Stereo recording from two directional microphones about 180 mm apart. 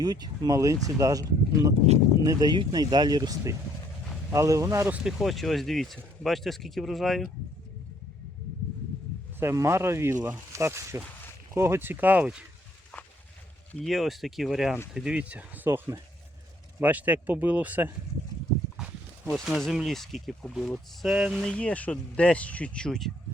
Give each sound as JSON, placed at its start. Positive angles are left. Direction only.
{"t": 0.0, "sound": "speech", "side_deg": -20}
{"t": 5.0, "sound": "speech", "side_deg": 0}
{"t": 9.4, "sound": "speech", "side_deg": -15}
{"t": 13.8, "sound": "speech", "side_deg": 0}
{"t": 21.5, "sound": "speech", "side_deg": 5}